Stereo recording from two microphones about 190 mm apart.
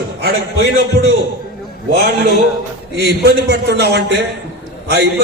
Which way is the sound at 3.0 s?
60° right (ahead or behind).